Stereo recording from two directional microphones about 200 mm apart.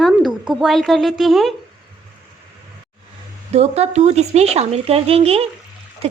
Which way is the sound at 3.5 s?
35° right (ahead or behind).